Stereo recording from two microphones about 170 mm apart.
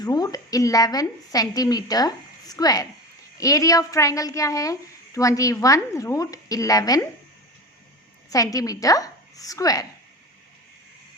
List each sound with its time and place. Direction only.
0.0 s a woman's voice: 20° left (ahead or behind)
8.3 s a woman's voice: 20° left (ahead or behind)